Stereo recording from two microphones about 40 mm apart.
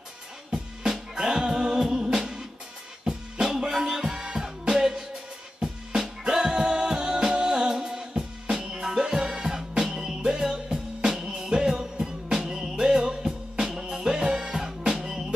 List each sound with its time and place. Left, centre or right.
0.5 s music: centre